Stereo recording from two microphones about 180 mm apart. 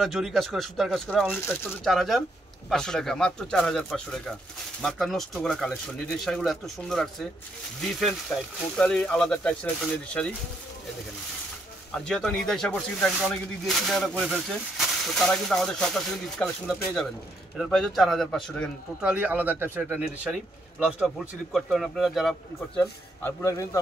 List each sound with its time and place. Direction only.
0.0 s speech: centre (ahead or behind)
11.9 s speech: 5° left (ahead or behind)
22.8 s speech: 15° left (ahead or behind)